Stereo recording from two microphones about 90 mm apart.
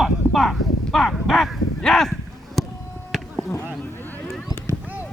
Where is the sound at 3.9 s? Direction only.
20° left (ahead or behind).